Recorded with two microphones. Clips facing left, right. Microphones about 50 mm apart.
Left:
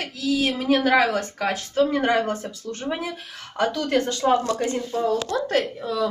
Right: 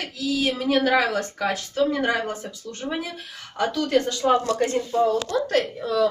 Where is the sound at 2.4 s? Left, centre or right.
Left.